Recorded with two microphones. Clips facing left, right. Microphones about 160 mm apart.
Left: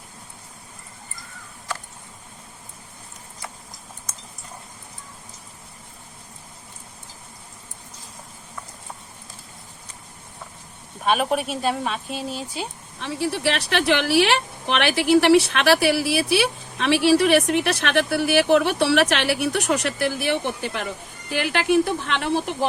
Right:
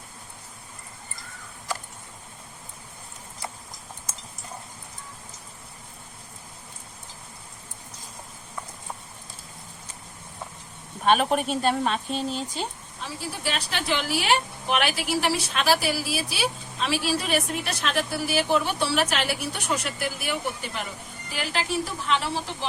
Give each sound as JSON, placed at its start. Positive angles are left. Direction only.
{"t": 11.0, "sound": "speech", "side_deg": 5}
{"t": 13.0, "sound": "speech", "side_deg": 70}